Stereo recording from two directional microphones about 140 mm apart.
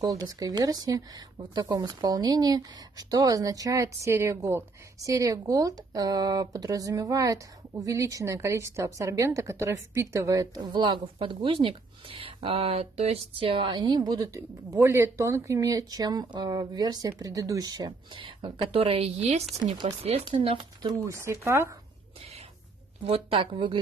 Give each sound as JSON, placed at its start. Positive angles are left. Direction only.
{"t": 0.0, "sound": "speech", "side_deg": -25}
{"t": 19.6, "sound": "speech", "side_deg": -35}
{"t": 21.0, "sound": "speech", "side_deg": -20}
{"t": 23.0, "sound": "speech", "side_deg": -45}